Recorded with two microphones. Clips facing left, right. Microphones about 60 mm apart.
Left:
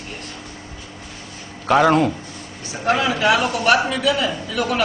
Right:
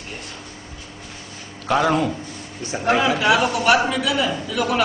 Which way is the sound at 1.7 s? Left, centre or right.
Left.